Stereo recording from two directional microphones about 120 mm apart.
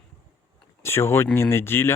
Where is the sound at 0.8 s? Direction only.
20° left (ahead or behind).